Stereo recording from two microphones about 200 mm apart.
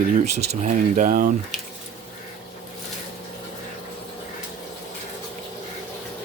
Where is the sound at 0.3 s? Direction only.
40° right (ahead or behind).